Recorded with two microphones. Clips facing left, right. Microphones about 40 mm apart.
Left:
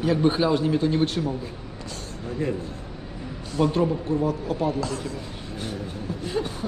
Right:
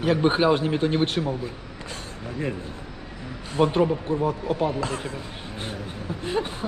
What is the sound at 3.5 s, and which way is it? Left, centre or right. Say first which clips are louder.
Speech: right 2 dB; right.